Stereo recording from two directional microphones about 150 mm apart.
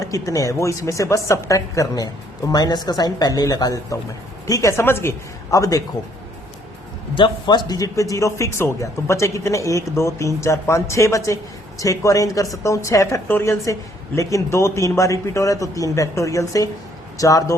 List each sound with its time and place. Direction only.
0.0 s speech: 20° left (ahead or behind)
7.2 s speech: 30° left (ahead or behind)